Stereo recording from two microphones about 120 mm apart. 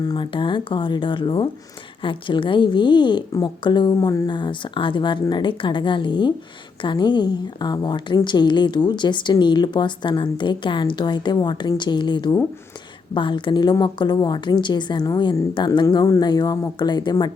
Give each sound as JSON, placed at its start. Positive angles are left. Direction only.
{"t": 0.1, "sound": "a woman's voice", "side_deg": 45}